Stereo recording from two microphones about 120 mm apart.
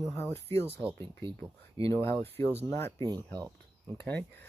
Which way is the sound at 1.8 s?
50° right (ahead or behind).